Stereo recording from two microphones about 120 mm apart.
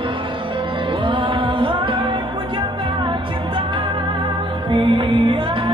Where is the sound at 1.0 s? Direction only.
45° right (ahead or behind).